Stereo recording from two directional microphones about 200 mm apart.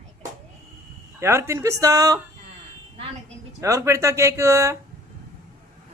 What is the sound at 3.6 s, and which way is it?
Speech, 15° right (ahead or behind).